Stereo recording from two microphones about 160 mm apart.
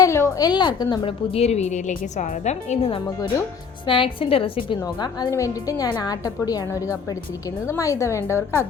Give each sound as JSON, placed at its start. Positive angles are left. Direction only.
{"t": 0.0, "sound": "a woman's voice", "side_deg": 15}
{"t": 1.7, "sound": "a woman's voice", "side_deg": 50}